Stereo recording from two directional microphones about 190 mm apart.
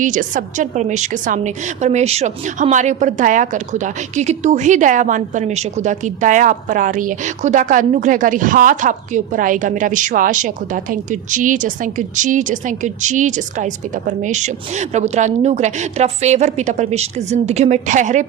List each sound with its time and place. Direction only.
0.0 s a woman's voice: 45° right (ahead or behind)